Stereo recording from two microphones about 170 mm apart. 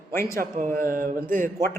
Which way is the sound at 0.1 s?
15° left (ahead or behind).